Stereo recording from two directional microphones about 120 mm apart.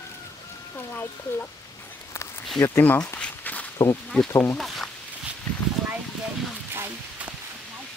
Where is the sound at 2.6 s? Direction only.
20° left (ahead or behind).